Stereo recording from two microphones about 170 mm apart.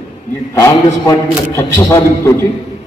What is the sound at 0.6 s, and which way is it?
A man's voice, 15° left (ahead or behind).